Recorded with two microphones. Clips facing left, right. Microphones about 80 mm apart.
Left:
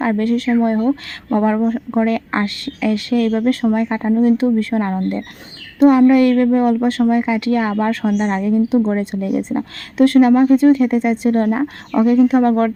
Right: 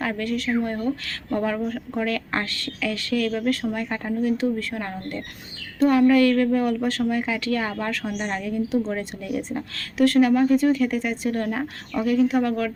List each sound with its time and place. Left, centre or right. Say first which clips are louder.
0.0 s speech: left 9 dB; left